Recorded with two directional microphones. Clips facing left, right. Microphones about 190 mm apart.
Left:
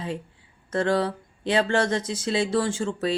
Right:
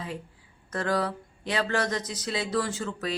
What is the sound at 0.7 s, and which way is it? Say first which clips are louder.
Speech: left 5 dB; 25° left (ahead or behind).